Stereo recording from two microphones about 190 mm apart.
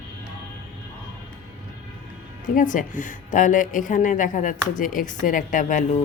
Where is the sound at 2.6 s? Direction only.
45° left (ahead or behind).